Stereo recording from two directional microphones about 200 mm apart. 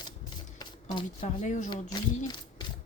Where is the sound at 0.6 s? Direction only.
25° left (ahead or behind).